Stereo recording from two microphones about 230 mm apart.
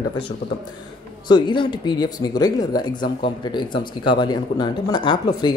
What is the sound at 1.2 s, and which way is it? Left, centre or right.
Speech, centre.